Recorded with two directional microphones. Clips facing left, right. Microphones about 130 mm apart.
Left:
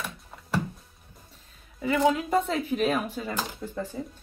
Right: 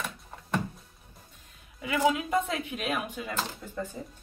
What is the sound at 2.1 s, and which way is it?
Speech, 35° left (ahead or behind).